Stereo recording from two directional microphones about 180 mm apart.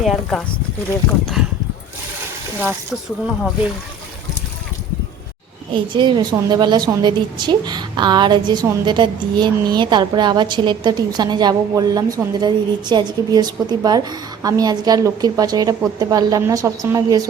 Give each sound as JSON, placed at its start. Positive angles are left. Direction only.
{"t": 0.0, "sound": "speech", "side_deg": 0}
{"t": 2.6, "sound": "speech", "side_deg": -5}
{"t": 5.7, "sound": "a woman's voice", "side_deg": -25}